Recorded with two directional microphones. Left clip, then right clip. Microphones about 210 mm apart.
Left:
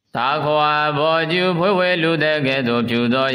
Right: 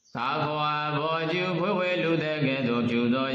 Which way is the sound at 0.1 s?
40° left (ahead or behind).